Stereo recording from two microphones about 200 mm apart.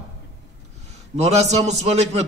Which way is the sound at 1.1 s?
35° right (ahead or behind).